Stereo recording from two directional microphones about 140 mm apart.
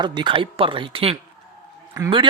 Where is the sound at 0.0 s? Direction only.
30° right (ahead or behind).